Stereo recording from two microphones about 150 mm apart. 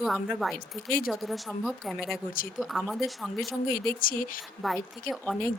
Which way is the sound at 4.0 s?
70° left (ahead or behind).